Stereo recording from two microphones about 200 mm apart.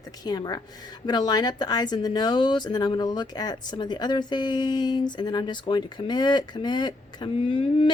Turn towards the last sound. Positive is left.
turn(degrees=25)  # may be behind; listen again after turning